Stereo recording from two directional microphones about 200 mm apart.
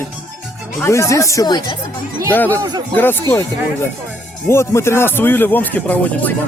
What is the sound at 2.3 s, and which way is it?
Speech, 10° left (ahead or behind).